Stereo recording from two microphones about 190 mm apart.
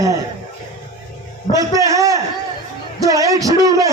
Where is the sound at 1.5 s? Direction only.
15° right (ahead or behind).